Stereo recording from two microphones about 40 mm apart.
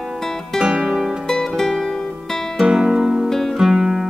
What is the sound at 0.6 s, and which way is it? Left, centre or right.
Music, right.